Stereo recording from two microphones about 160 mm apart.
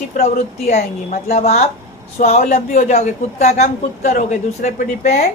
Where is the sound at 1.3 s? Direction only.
45° left (ahead or behind).